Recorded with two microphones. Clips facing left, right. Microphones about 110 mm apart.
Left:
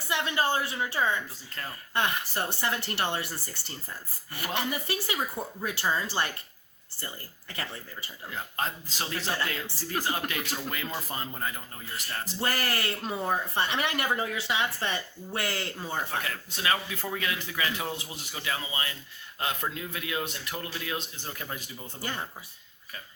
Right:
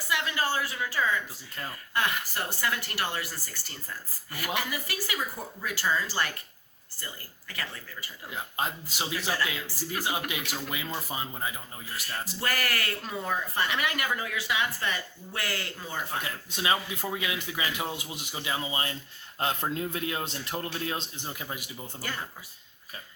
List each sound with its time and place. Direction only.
0.1 s speech: 25° left (ahead or behind)
8.5 s speech: 10° right (ahead or behind)
9.3 s speech: 25° left (ahead or behind)
10.0 s speech: 15° right (ahead or behind)
12.4 s speech: 25° left (ahead or behind)
16.2 s speech: 20° right (ahead or behind)
21.2 s speech: 15° right (ahead or behind)